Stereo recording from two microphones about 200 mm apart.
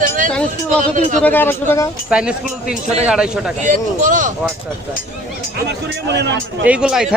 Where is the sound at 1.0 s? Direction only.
40° right (ahead or behind).